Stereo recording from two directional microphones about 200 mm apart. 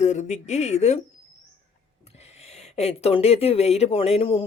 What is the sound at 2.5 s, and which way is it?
Speech, 30° left (ahead or behind).